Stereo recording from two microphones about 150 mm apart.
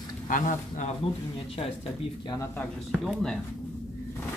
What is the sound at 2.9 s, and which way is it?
Speech, centre (ahead or behind).